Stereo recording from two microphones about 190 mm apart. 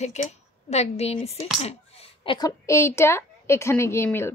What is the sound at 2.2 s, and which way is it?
A woman's voice, 20° left (ahead or behind).